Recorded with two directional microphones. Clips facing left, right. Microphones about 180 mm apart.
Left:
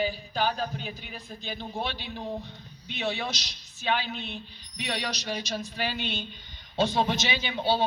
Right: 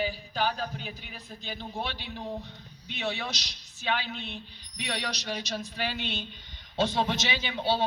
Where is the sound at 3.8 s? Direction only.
15° left (ahead or behind).